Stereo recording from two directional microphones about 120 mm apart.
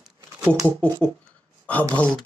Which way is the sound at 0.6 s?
10° left (ahead or behind).